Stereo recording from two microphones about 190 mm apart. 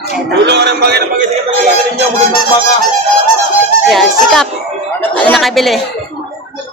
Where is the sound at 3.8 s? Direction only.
Centre (ahead or behind).